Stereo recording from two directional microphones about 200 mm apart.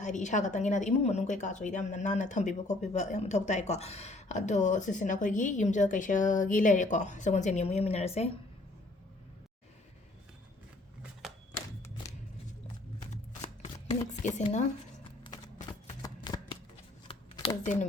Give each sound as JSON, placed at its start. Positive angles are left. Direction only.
{"t": 0.0, "sound": "a woman's voice", "side_deg": 35}
{"t": 14.1, "sound": "a woman's voice", "side_deg": 35}
{"t": 16.0, "sound": "shuffling cards", "side_deg": 20}